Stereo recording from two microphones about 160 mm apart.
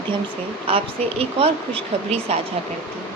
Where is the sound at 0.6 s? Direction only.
35° right (ahead or behind).